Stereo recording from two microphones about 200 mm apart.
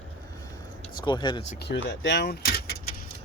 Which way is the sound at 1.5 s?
60° left (ahead or behind).